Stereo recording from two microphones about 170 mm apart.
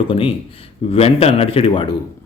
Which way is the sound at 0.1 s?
35° left (ahead or behind).